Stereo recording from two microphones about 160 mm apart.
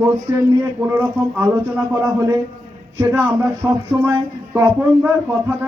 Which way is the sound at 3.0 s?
15° right (ahead or behind).